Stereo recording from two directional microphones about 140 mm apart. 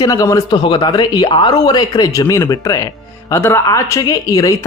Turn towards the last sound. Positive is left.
turn(degrees=25)  # may be behind; listen again after turning